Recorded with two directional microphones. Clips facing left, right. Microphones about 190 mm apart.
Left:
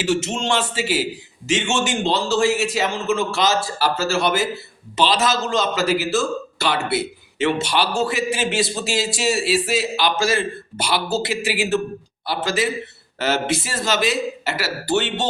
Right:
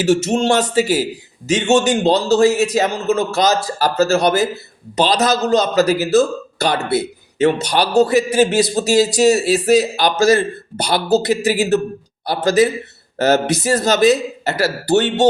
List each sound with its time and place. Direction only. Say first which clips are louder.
0.0 s a man's voice: right 7 dB; 40° right (ahead or behind)